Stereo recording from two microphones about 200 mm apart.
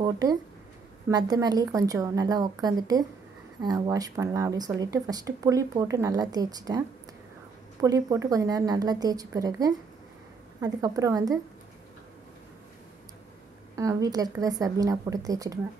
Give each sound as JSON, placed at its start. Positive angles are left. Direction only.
{"t": 0.0, "sound": "speech", "side_deg": -20}
{"t": 7.8, "sound": "a woman's voice", "side_deg": -15}
{"t": 13.7, "sound": "a woman's voice", "side_deg": -15}